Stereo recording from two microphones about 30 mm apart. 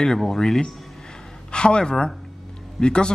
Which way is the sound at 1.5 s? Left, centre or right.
Left.